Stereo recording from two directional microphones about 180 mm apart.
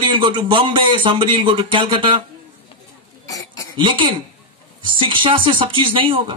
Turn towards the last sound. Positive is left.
turn(degrees=-30)  # may be behind; listen again after turning